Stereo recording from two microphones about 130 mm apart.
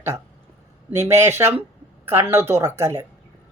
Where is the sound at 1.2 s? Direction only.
20° right (ahead or behind).